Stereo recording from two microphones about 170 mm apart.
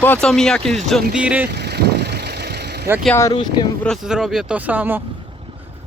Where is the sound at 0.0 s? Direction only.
10° left (ahead or behind).